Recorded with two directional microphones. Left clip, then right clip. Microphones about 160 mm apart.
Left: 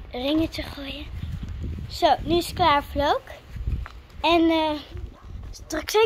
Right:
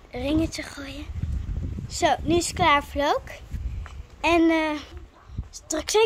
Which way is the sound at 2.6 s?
5° right (ahead or behind).